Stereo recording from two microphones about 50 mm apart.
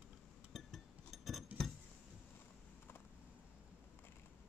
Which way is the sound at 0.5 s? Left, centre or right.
Centre.